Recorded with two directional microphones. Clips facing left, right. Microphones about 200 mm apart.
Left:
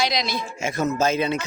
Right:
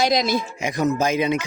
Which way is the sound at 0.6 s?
15° right (ahead or behind).